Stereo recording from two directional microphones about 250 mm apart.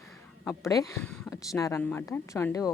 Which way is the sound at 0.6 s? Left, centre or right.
Centre.